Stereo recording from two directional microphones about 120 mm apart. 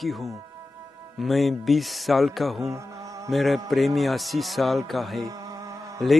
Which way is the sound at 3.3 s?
Centre (ahead or behind).